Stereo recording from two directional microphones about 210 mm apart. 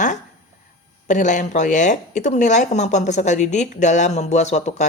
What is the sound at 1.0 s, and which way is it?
A woman's voice, 35° left (ahead or behind).